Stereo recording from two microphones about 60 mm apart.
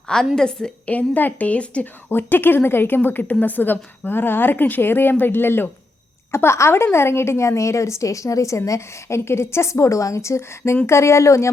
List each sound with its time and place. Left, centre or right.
0.3 s a woman's voice: centre
0.9 s a woman's voice: left
2.0 s a woman's voice: left